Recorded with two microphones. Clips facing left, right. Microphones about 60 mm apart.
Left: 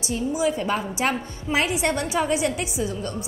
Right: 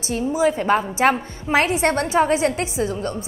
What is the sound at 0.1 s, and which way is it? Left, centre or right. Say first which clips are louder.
A woman's voice: right 4 dB; right.